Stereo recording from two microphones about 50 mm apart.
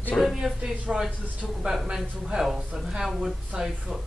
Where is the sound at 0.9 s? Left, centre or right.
Centre.